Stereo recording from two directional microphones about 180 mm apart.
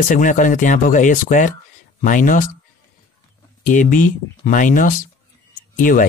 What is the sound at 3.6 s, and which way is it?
Speech, 45° left (ahead or behind).